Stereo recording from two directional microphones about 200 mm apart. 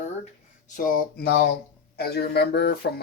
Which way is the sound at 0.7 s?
45° left (ahead or behind).